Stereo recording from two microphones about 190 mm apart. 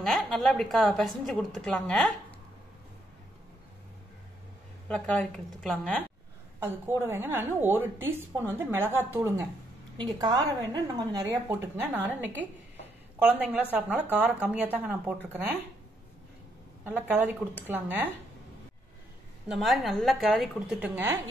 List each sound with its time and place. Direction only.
0.0 s a woman's voice: centre (ahead or behind)
4.8 s a woman's voice: 5° left (ahead or behind)
6.6 s a woman's voice: 10° right (ahead or behind)
16.8 s a woman's voice: 10° right (ahead or behind)
19.4 s a woman's voice: centre (ahead or behind)